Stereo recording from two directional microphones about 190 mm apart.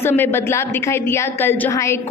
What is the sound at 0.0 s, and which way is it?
A woman's voice, 10° left (ahead or behind).